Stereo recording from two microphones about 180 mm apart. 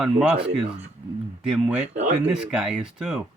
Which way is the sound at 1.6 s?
5° right (ahead or behind).